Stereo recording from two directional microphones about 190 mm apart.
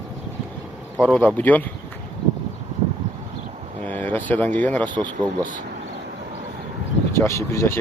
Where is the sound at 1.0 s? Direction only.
5° left (ahead or behind).